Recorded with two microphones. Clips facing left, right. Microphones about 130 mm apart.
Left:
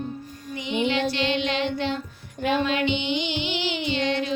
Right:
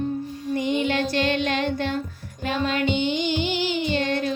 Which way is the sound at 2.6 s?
45° right (ahead or behind).